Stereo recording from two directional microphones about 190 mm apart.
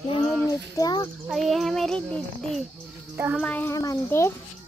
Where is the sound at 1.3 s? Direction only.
Centre (ahead or behind).